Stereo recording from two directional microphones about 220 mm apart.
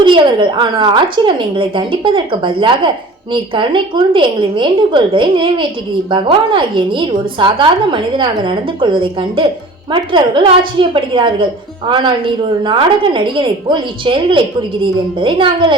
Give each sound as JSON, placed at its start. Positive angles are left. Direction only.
{"t": 0.0, "sound": "a woman's voice", "side_deg": -20}